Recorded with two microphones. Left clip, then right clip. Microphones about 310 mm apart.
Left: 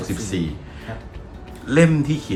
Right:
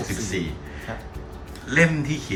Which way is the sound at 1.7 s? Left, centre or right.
Centre.